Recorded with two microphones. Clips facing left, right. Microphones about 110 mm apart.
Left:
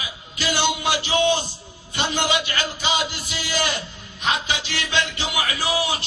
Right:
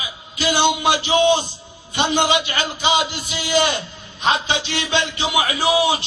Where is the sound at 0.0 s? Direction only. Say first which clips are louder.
Right 4 dB; 20° right (ahead or behind).